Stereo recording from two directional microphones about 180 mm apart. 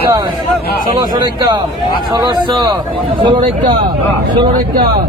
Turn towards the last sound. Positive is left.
turn(degrees=-25)  # may be behind; listen again after turning